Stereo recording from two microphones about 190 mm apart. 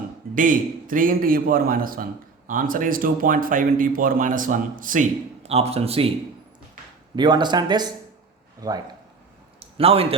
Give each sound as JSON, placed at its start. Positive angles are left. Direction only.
{"t": 0.3, "sound": "speech", "side_deg": -45}
{"t": 7.2, "sound": "speech", "side_deg": -25}
{"t": 9.6, "sound": "a sound", "side_deg": -30}